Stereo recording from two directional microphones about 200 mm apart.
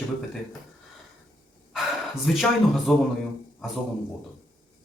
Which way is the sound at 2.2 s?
Centre (ahead or behind).